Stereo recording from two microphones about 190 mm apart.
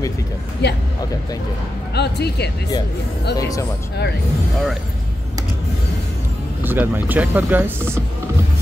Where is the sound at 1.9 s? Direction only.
60° left (ahead or behind).